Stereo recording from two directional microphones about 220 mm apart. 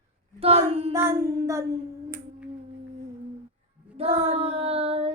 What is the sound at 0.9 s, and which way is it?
Speech, 10° right (ahead or behind).